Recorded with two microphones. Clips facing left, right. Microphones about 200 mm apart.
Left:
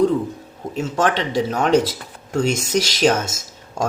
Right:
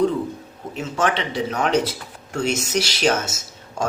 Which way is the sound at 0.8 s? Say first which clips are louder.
Left 3 dB; 45° left (ahead or behind).